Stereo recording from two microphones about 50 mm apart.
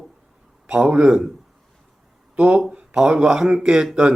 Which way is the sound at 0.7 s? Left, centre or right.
Right.